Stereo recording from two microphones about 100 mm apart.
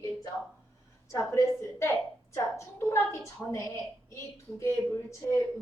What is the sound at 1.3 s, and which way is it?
A woman's voice, 30° left (ahead or behind).